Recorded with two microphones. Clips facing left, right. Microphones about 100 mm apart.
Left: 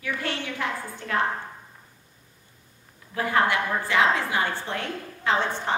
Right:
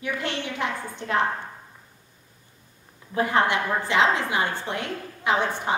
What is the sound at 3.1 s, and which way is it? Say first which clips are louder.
A woman's voice: right 1 dB; 20° right (ahead or behind).